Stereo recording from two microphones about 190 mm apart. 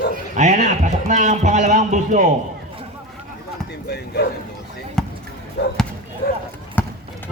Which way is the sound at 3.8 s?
60° left (ahead or behind).